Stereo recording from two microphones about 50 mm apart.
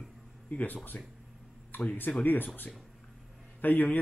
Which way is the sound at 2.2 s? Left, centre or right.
Left.